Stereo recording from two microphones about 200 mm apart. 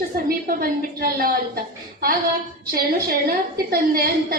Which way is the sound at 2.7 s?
50° right (ahead or behind).